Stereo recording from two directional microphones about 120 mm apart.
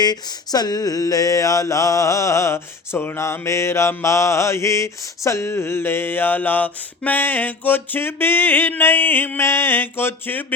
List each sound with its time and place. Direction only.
0.0 s mantra: 35° left (ahead or behind); by 10.4 s 20° left (ahead or behind)